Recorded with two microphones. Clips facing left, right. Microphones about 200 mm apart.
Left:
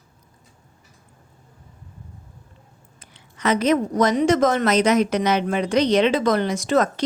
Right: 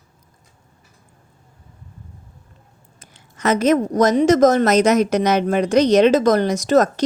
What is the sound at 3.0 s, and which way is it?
A woman's voice, 45° right (ahead or behind).